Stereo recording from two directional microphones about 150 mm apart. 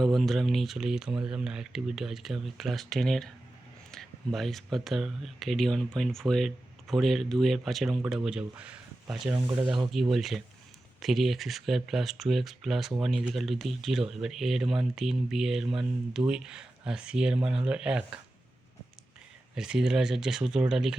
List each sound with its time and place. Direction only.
0.0 s speech: centre (ahead or behind)
9.3 s speech: 20° right (ahead or behind)
9.9 s speech: centre (ahead or behind)
19.5 s speech: 5° right (ahead or behind)